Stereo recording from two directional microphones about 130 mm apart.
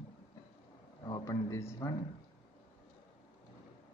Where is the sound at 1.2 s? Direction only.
25° left (ahead or behind).